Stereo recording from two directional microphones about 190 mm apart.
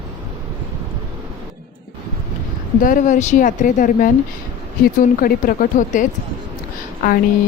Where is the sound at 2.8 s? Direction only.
45° left (ahead or behind).